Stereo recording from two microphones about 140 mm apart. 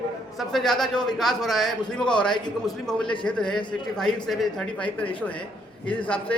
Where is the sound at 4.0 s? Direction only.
5° left (ahead or behind).